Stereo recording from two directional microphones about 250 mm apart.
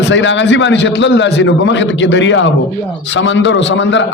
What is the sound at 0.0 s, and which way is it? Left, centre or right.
A man's voice, left.